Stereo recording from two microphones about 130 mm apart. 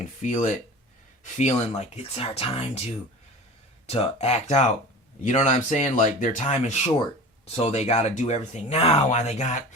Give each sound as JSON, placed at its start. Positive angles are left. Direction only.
{"t": 0.0, "sound": "speech", "side_deg": 65}
{"t": 3.8, "sound": "speech", "side_deg": 50}